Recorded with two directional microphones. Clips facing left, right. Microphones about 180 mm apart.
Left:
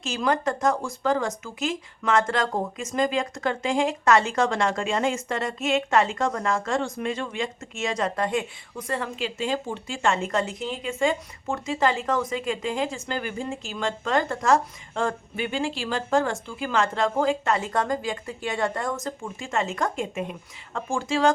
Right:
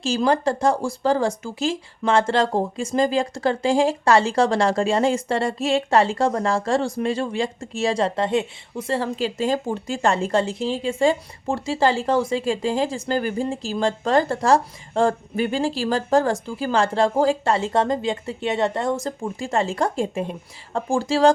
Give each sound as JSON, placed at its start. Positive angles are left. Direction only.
{"t": 0.0, "sound": "speech", "side_deg": -30}